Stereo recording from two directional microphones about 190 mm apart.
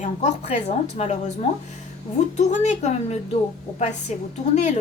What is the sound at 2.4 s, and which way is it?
A woman's voice, 40° left (ahead or behind).